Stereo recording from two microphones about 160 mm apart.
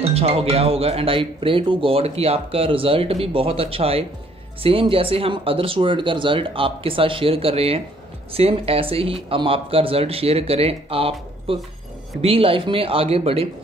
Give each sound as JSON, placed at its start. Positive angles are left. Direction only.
{"t": 0.0, "sound": "speech", "side_deg": -40}